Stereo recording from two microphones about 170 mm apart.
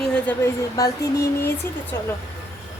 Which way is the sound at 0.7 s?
20° left (ahead or behind).